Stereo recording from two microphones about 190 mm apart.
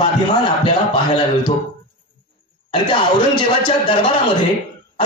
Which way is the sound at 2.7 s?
25° left (ahead or behind).